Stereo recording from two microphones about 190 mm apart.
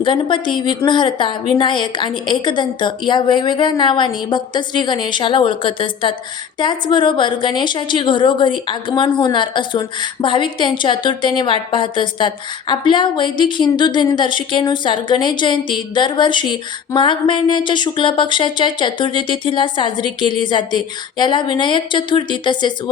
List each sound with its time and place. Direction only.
0.0 s a woman's voice: 25° left (ahead or behind)